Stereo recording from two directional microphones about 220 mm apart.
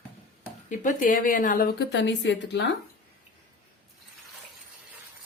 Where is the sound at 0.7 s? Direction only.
35° left (ahead or behind); by 2.7 s 50° left (ahead or behind).